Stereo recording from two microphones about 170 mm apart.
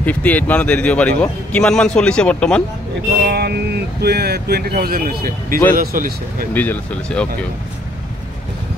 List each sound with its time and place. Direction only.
0.0 s speech: 10° left (ahead or behind)
3.3 s speech: 70° right (ahead or behind)
6.5 s speech: 10° left (ahead or behind)